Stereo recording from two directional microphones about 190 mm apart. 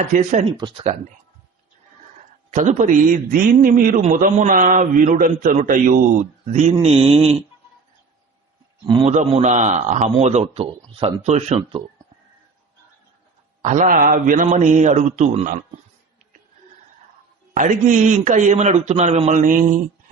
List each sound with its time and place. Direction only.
0.1 s a man's voice: 40° right (ahead or behind)
0.5 s speech: 25° right (ahead or behind)
2.5 s a man's voice: 40° right (ahead or behind)
8.9 s speech: 25° right (ahead or behind)
9.1 s a man's voice: 40° right (ahead or behind)
13.6 s a man's voice: 40° right (ahead or behind)
17.5 s a man's voice: 45° right (ahead or behind)